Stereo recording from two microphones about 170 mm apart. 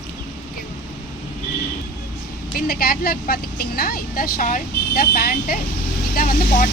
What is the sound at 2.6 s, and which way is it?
A woman's voice, 60° left (ahead or behind).